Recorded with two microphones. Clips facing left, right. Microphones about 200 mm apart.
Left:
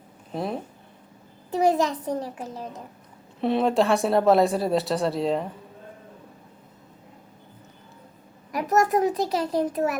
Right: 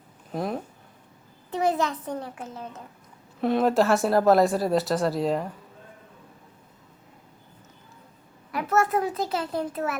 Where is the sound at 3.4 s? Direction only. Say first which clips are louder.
Even; centre (ahead or behind).